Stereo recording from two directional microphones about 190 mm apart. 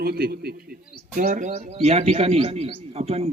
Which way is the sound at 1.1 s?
40° right (ahead or behind).